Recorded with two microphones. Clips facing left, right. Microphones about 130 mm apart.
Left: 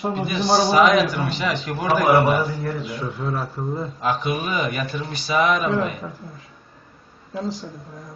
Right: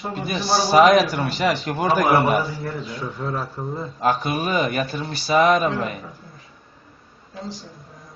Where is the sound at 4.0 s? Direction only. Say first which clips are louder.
Right 3 dB; 40° right (ahead or behind).